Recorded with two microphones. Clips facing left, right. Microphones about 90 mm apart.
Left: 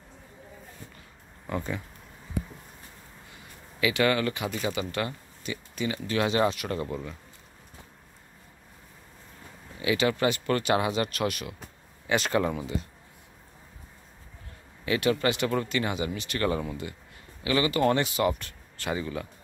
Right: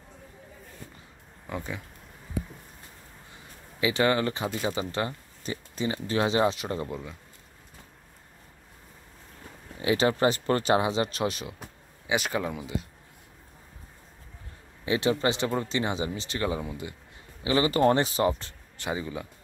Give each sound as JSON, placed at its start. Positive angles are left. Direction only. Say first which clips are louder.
{"t": 1.5, "sound": "speech", "louder": "left 3 dB", "side_deg": -5}
{"t": 3.8, "sound": "speech", "louder": "even", "side_deg": -25}
{"t": 9.8, "sound": "speech", "louder": "right 2 dB", "side_deg": -35}
{"t": 12.1, "sound": "speech", "louder": "left 3 dB", "side_deg": -5}
{"t": 14.9, "sound": "speech", "louder": "even", "side_deg": -25}
{"t": 16.4, "sound": "speech", "louder": "left 3 dB", "side_deg": -10}